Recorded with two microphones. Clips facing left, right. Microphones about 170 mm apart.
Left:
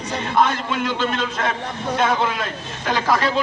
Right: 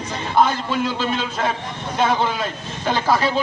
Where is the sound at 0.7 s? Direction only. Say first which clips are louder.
Right 1 dB; 30° right (ahead or behind).